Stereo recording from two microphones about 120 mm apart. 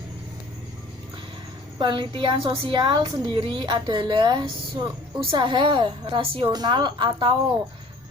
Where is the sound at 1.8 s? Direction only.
40° right (ahead or behind).